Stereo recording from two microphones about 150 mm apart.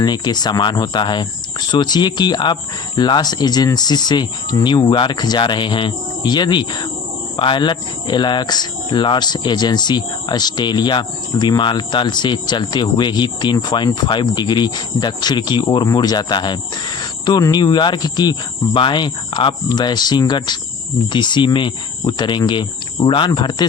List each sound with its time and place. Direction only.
0.0 s speech: 30° left (ahead or behind)